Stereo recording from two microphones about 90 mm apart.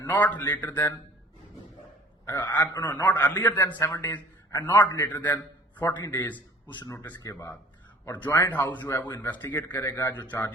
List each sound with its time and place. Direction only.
0.1 s a man's voice: 20° left (ahead or behind)
2.2 s a man's voice: 20° left (ahead or behind)
7.2 s speech: 35° left (ahead or behind)
8.1 s a man's voice: 20° left (ahead or behind)